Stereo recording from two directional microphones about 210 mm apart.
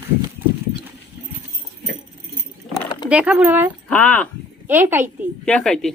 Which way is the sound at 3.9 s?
5° left (ahead or behind).